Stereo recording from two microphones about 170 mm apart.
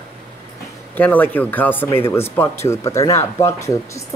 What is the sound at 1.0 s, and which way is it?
Speech, 10° left (ahead or behind).